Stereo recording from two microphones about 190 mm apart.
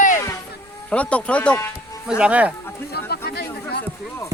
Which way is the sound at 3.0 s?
55° left (ahead or behind).